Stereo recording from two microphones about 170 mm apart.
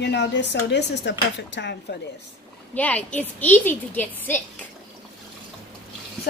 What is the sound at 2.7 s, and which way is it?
A woman's voice, 10° left (ahead or behind).